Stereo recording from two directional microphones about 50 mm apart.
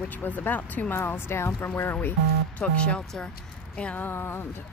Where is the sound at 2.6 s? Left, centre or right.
Left.